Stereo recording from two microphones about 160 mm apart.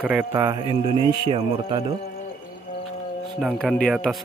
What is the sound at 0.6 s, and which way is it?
Speech, 35° right (ahead or behind).